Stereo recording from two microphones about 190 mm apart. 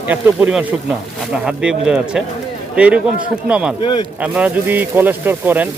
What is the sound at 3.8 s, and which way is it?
Speech, 25° left (ahead or behind).